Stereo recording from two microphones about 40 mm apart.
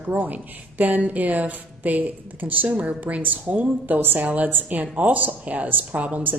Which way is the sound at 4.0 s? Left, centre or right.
Right.